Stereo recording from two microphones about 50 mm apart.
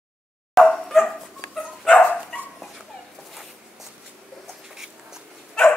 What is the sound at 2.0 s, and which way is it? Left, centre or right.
Dog, left.